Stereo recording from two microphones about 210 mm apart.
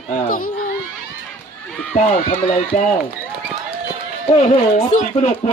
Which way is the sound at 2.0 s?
35° left (ahead or behind).